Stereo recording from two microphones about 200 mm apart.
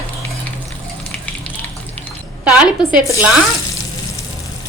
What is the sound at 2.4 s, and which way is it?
Speech, 5° right (ahead or behind).